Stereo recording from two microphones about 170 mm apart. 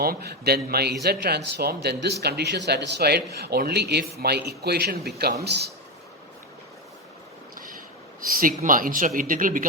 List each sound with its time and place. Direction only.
0.0 s a man's voice: 65° right (ahead or behind)
7.5 s vehicle: 50° right (ahead or behind)
8.3 s speech: 55° right (ahead or behind)